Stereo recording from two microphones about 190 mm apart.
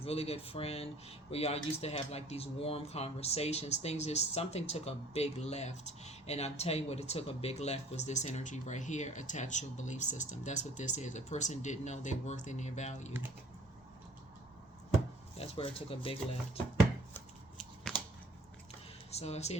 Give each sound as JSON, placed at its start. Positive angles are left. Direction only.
{"t": 0.0, "sound": "speech", "side_deg": 30}
{"t": 15.4, "sound": "speech", "side_deg": 30}
{"t": 17.9, "sound": "a sound", "side_deg": 5}
{"t": 19.1, "sound": "speech", "side_deg": 35}